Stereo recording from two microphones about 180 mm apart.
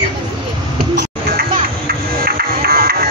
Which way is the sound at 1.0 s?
50° right (ahead or behind).